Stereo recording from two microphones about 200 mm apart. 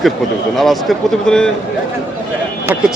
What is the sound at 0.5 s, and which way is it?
Speech, centre (ahead or behind).